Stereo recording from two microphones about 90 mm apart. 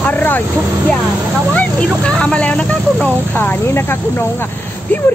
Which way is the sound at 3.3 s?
25° left (ahead or behind).